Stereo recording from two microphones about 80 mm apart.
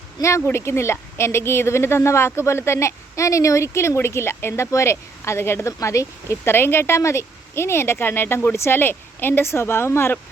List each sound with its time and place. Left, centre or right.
0.2 s a woman's voice: left